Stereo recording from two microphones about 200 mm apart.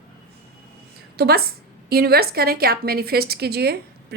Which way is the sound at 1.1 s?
50° right (ahead or behind).